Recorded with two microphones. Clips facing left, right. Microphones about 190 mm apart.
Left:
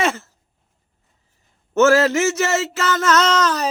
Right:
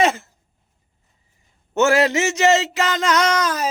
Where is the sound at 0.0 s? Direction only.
15° right (ahead or behind).